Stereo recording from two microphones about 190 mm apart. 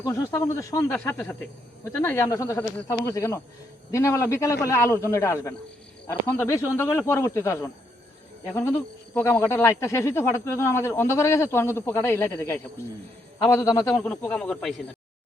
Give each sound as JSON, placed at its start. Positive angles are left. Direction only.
{"t": 0.0, "sound": "speech", "side_deg": 15}